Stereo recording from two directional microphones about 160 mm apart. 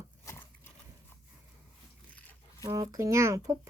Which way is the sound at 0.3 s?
15° left (ahead or behind).